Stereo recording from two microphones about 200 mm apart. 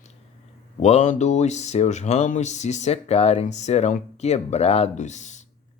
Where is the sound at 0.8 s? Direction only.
35° left (ahead or behind).